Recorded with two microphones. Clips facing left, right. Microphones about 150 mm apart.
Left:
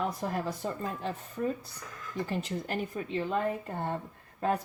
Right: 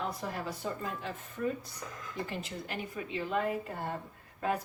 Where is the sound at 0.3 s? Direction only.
40° left (ahead or behind).